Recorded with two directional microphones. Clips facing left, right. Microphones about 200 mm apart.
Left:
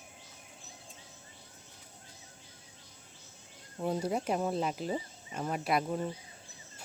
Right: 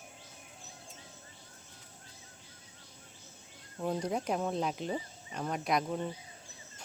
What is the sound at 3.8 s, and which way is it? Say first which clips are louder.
Speech: left 1 dB; 10° left (ahead or behind).